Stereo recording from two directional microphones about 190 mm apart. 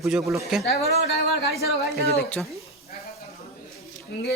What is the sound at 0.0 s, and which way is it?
Speech, centre (ahead or behind).